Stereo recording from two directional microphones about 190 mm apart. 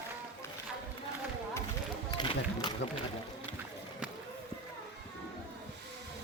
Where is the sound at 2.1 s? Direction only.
25° left (ahead or behind).